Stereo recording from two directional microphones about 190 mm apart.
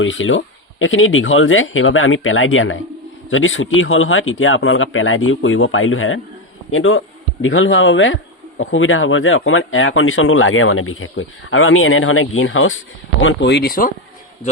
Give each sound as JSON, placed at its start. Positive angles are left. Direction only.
{"t": 0.0, "sound": "speech", "side_deg": 90}